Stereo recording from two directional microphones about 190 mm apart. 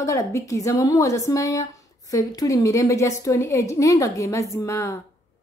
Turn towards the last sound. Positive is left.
turn(degrees=15)  # may be behind; listen again after turning